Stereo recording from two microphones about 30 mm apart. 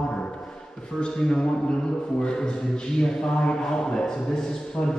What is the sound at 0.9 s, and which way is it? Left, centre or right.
Speech, left.